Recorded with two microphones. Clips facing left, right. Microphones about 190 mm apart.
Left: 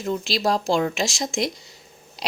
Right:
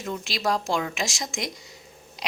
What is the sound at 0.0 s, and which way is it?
A woman's voice, 30° left (ahead or behind).